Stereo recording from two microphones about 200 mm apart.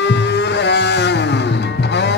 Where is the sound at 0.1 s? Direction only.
60° left (ahead or behind).